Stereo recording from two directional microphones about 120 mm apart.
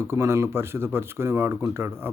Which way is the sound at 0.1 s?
20° right (ahead or behind).